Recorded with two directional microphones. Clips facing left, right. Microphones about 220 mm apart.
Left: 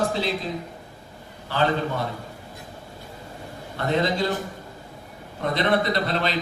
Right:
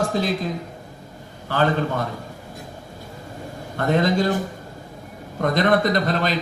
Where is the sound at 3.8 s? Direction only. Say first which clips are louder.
Right 4 dB; 45° right (ahead or behind).